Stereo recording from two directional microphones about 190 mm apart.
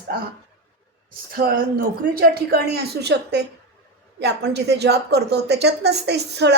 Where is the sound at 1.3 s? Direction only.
50° right (ahead or behind).